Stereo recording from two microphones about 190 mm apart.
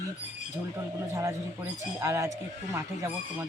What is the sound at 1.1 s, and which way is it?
Speech, 15° right (ahead or behind).